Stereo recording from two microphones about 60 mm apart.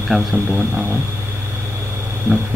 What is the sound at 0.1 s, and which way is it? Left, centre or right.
Speech, centre.